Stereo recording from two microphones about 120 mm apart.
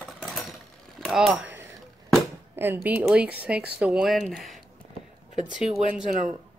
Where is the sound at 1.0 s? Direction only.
Centre (ahead or behind).